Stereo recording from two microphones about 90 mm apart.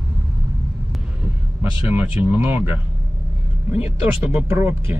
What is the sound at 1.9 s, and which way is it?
Speech, 20° right (ahead or behind).